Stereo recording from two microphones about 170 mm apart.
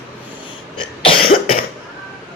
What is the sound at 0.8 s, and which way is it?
Cough, 30° left (ahead or behind).